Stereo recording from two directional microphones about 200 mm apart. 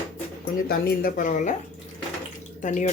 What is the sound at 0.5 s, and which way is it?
Speech, 45° left (ahead or behind).